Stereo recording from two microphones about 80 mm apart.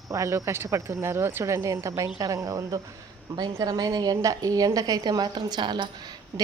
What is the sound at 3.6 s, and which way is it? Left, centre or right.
A woman's voice, right.